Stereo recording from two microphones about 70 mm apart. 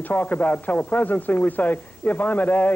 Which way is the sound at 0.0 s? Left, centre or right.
Left.